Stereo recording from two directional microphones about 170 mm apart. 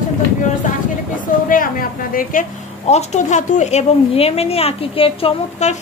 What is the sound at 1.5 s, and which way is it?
Speech, 55° left (ahead or behind).